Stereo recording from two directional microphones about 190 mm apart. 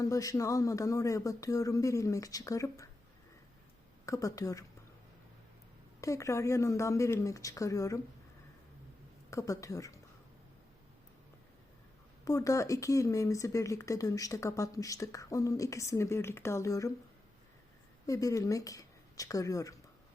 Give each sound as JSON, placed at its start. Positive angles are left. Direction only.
{"t": 0.0, "sound": "speech", "side_deg": 15}
{"t": 4.0, "sound": "speech", "side_deg": 15}
{"t": 6.0, "sound": "speech", "side_deg": 15}
{"t": 9.3, "sound": "speech", "side_deg": 15}
{"t": 12.2, "sound": "speech", "side_deg": 15}
{"t": 18.0, "sound": "speech", "side_deg": 15}